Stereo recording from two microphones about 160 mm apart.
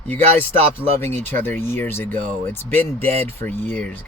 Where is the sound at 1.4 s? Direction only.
15° left (ahead or behind).